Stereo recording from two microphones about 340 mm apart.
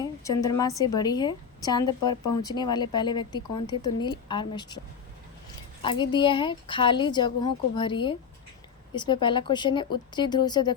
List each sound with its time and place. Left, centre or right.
0.0 s a woman's voice: centre
5.8 s speech: centre